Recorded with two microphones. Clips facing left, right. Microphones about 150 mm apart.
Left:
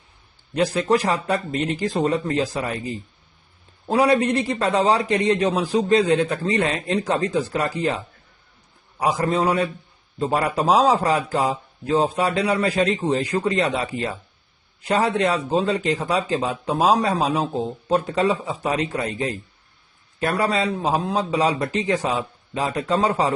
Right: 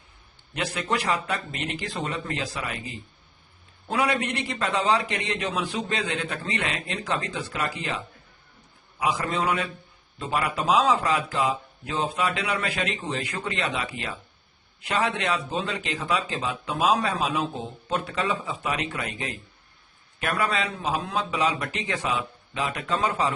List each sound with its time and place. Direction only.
0.5 s a man's voice: 35° left (ahead or behind)